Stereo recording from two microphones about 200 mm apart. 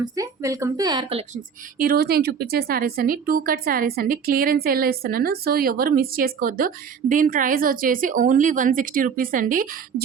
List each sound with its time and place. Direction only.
0.0 s speech: 15° right (ahead or behind)
1.8 s speech: 50° right (ahead or behind)